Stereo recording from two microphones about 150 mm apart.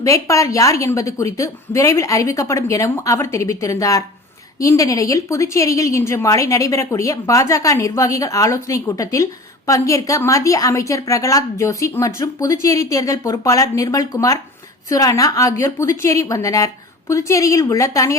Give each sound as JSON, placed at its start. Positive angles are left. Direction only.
{"t": 0.0, "sound": "speech", "side_deg": 20}